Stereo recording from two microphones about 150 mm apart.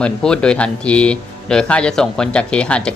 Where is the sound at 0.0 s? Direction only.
5° left (ahead or behind).